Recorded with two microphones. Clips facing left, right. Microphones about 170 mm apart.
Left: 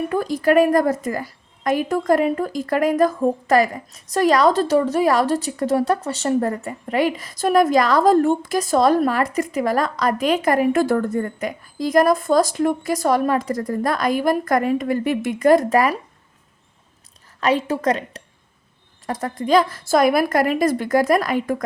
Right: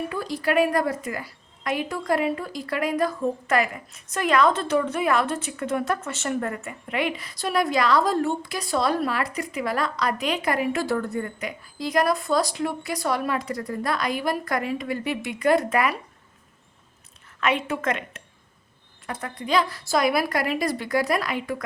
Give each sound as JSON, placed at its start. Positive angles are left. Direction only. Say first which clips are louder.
{"t": 0.1, "sound": "a woman's voice", "louder": "left 10 dB", "side_deg": 50}
{"t": 17.4, "sound": "a woman's voice", "louder": "left 5 dB", "side_deg": 35}